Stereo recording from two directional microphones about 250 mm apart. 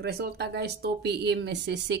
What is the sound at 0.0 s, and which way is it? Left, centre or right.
Speech, right.